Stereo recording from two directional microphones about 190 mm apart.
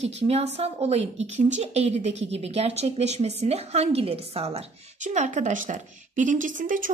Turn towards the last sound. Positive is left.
turn(degrees=-45)  # may be behind; listen again after turning